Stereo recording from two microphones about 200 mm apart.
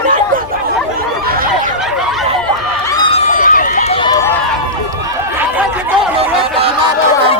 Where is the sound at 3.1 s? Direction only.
35° left (ahead or behind).